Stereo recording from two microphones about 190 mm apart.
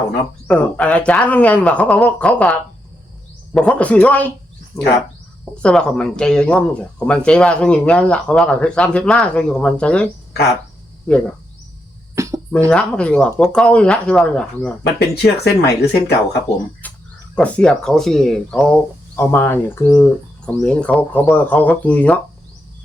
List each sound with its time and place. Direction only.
0.4 s speech: 5° left (ahead or behind)
5.6 s speech: 5° left (ahead or behind)
12.1 s a sound: 15° right (ahead or behind)
12.5 s speech: 5° left (ahead or behind)
14.9 s speech: 60° left (ahead or behind)
16.8 s a sound: 10° left (ahead or behind)
17.3 s speech: 5° left (ahead or behind)